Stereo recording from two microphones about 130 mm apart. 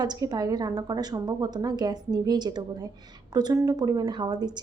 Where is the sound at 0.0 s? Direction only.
30° right (ahead or behind).